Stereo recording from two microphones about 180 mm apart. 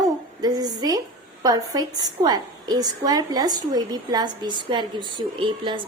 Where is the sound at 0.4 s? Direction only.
20° right (ahead or behind).